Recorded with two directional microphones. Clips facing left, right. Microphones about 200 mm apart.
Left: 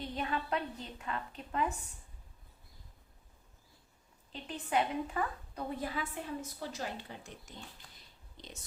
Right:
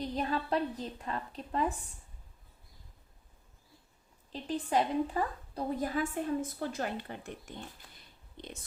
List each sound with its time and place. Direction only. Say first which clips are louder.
0.0 s a woman's voice: right 4 dB; 35° right (ahead or behind)
4.3 s a woman's voice: right 4 dB; 35° right (ahead or behind); by 8.5 s 55° right (ahead or behind)